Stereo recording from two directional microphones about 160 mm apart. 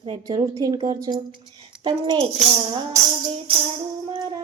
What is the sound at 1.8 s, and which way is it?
A child's voice, 30° right (ahead or behind).